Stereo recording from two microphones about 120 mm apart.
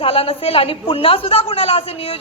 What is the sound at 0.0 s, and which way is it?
A woman's voice, 50° left (ahead or behind).